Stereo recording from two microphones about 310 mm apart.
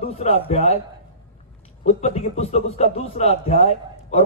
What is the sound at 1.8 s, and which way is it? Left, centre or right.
A man's voice, left.